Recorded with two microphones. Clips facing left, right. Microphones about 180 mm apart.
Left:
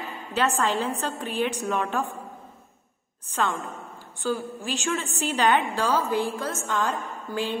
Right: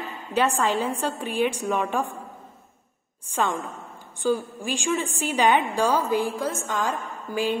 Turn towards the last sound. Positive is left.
turn(degrees=-10)  # may be behind; listen again after turning